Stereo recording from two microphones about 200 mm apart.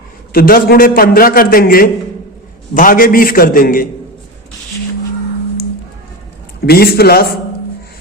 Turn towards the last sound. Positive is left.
turn(degrees=50)  # may be behind; listen again after turning